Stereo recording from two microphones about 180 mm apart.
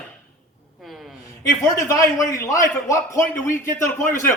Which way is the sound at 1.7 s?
20° left (ahead or behind).